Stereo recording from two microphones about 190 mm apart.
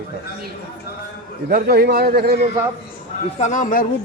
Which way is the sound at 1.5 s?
55° right (ahead or behind).